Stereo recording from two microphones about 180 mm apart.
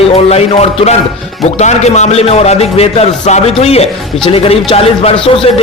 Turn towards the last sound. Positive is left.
turn(degrees=30)  # may be behind; listen again after turning